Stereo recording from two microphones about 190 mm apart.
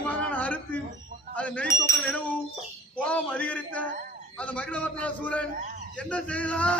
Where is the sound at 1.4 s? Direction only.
5° left (ahead or behind).